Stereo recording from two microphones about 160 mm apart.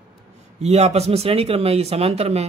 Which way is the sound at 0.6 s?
40° right (ahead or behind).